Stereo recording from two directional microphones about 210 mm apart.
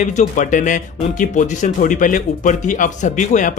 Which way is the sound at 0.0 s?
35° left (ahead or behind).